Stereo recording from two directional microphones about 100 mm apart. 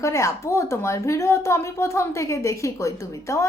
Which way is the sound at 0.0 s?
30° left (ahead or behind).